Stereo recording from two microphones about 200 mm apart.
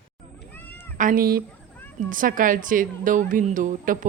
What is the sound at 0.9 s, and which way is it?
A woman's voice, 45° right (ahead or behind).